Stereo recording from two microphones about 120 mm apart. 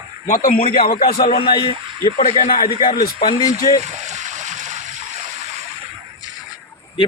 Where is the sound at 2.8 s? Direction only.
50° left (ahead or behind).